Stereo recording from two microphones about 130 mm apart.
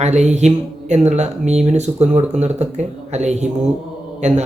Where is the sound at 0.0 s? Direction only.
60° right (ahead or behind).